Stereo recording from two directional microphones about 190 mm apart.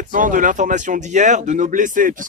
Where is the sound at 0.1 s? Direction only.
45° right (ahead or behind).